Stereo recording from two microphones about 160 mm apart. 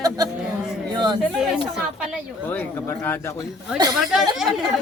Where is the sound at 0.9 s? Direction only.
30° right (ahead or behind).